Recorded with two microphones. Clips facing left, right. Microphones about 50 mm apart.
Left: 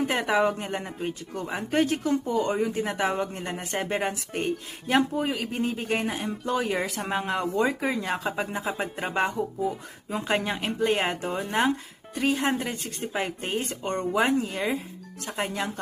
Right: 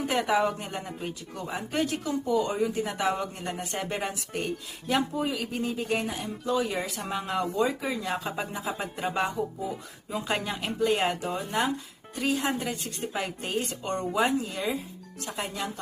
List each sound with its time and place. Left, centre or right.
0.1 s speech: left